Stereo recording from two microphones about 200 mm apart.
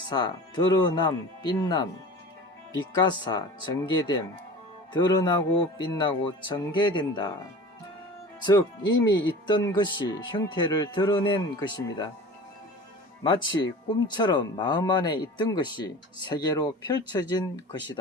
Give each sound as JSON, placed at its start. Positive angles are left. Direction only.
{"t": 0.1, "sound": "speech", "side_deg": 20}
{"t": 9.0, "sound": "speech", "side_deg": 20}
{"t": 13.2, "sound": "speech", "side_deg": 20}